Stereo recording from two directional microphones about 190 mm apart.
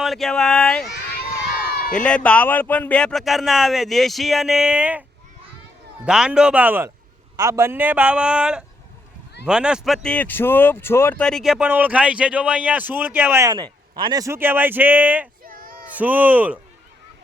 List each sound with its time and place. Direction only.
0.0 s speech: centre (ahead or behind)
0.9 s crowd: 55° left (ahead or behind)
1.9 s speech: 5° left (ahead or behind)
6.1 s speech: 5° right (ahead or behind)
15.4 s a sound: 50° right (ahead or behind)
15.9 s speech: 10° right (ahead or behind)